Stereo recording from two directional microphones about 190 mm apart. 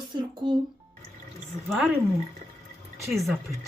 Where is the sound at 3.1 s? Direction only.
Centre (ahead or behind).